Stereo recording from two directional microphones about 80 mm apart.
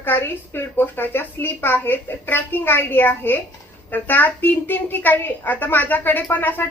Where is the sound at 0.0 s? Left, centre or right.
Left.